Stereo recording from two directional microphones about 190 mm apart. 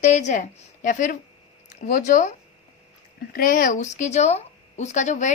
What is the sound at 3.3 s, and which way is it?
A woman's voice, 50° left (ahead or behind).